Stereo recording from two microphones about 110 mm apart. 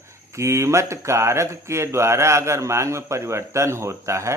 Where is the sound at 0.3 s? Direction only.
25° right (ahead or behind).